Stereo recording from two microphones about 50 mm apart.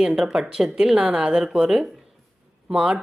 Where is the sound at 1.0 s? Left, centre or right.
Right.